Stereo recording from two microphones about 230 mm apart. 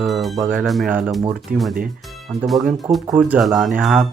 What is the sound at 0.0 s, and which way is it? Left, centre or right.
Speech, centre.